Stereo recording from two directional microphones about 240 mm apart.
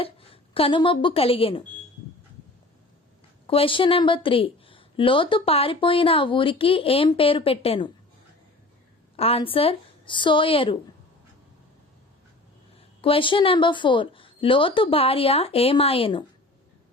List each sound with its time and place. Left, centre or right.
0.0 s speech: left
3.4 s speech: left
9.1 s speech: left
12.7 s speech: left